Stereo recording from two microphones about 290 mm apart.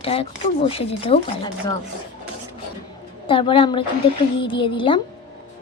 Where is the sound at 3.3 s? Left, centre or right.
Centre.